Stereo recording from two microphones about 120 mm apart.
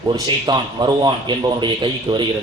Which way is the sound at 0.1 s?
35° right (ahead or behind).